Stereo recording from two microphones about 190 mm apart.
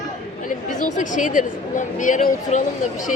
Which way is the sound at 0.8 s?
45° left (ahead or behind).